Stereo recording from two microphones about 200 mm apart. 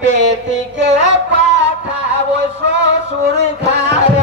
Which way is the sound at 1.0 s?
65° right (ahead or behind).